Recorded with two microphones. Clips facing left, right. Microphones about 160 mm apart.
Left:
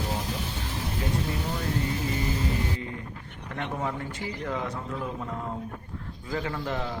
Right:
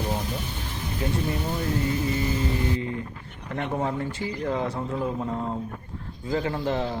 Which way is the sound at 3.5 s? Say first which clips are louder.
Right 4 dB; 30° right (ahead or behind).